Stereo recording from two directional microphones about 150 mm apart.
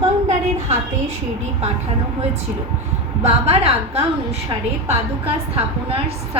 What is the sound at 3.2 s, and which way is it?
Speech, 45° right (ahead or behind).